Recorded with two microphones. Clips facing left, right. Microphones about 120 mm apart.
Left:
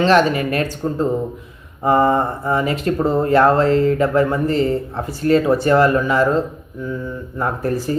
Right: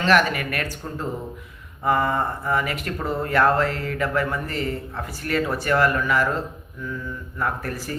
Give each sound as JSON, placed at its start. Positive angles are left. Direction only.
{"t": 0.0, "sound": "speech", "side_deg": 25}